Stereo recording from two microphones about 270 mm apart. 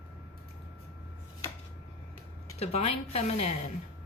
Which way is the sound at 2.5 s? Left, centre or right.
Left.